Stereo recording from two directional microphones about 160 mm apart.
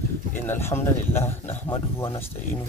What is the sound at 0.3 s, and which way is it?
Speech, 15° left (ahead or behind).